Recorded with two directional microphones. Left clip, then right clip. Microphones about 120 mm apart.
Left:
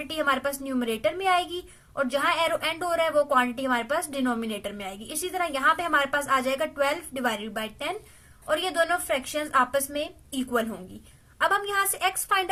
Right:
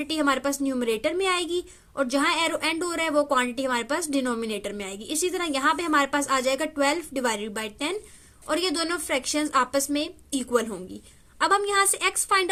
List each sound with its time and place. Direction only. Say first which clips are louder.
0.0 s speech: right 1 dB; 30° right (ahead or behind)
11.3 s speech: right 2 dB; 25° right (ahead or behind)